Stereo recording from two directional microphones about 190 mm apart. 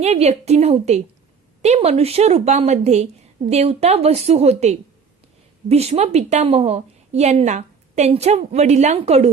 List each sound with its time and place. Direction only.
0.0 s a woman's voice: 35° right (ahead or behind)